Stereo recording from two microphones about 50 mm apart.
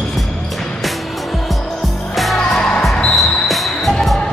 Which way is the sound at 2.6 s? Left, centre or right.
Left.